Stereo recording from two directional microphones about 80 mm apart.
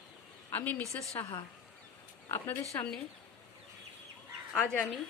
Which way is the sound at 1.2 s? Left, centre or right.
Left.